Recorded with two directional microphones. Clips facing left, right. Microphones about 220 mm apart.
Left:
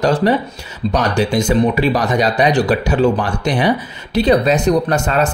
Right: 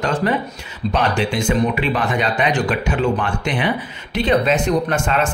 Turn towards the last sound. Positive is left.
turn(degrees=40)  # may be behind; listen again after turning